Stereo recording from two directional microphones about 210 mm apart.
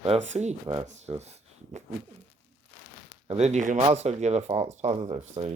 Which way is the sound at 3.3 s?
30° right (ahead or behind).